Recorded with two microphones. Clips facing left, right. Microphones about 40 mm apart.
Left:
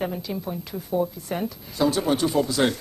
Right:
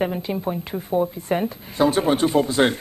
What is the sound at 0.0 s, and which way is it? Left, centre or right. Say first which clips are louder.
A woman's voice: right 5 dB; right.